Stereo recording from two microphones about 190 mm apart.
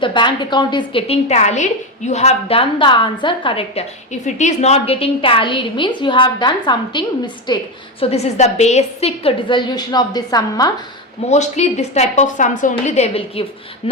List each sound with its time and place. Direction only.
0.0 s a woman's voice: 25° left (ahead or behind)
8.0 s a woman's voice: 35° left (ahead or behind)
11.3 s a woman's voice: 35° left (ahead or behind)